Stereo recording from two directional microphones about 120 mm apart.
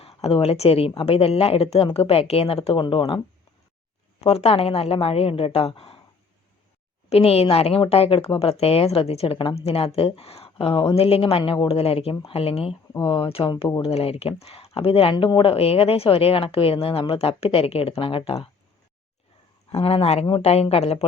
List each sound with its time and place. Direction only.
0.0 s a woman's voice: 55° left (ahead or behind)
4.2 s speech: 60° left (ahead or behind)
7.1 s a woman's voice: 55° left (ahead or behind)
19.8 s a woman's voice: 55° left (ahead or behind)